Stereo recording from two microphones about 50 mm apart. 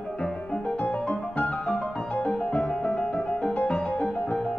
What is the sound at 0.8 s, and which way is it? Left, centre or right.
Music, left.